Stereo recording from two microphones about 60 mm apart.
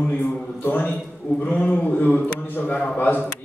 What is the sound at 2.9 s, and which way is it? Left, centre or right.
Speech, left.